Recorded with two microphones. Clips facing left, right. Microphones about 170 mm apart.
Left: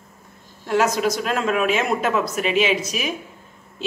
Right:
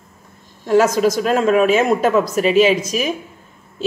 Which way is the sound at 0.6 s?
40° right (ahead or behind).